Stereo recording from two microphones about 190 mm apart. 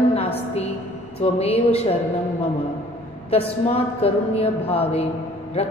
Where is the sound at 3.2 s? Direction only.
30° left (ahead or behind).